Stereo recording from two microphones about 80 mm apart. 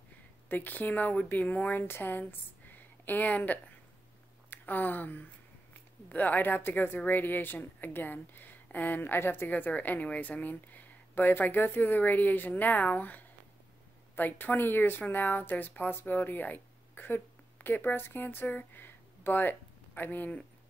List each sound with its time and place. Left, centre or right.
0.5 s speech: left